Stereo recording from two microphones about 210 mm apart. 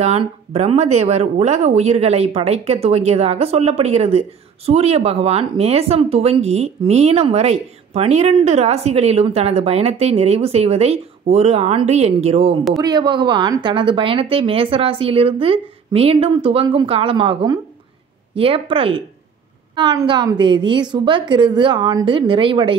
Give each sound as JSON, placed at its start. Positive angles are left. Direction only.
{"t": 0.0, "sound": "speech", "side_deg": -30}